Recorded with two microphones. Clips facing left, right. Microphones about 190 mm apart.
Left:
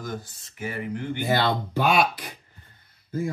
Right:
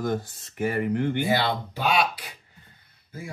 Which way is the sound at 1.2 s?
50° left (ahead or behind).